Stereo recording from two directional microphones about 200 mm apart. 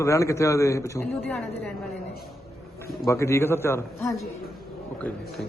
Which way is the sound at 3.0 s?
15° left (ahead or behind).